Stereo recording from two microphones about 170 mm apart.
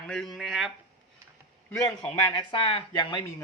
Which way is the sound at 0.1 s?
Centre (ahead or behind).